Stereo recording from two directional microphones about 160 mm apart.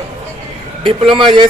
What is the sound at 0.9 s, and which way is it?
Speech, 30° right (ahead or behind).